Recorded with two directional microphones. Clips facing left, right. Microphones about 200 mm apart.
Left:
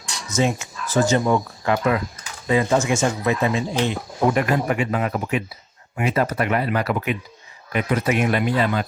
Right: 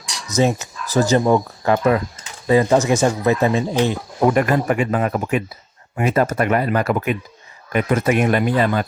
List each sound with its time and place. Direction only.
0.3 s speech: 40° right (ahead or behind)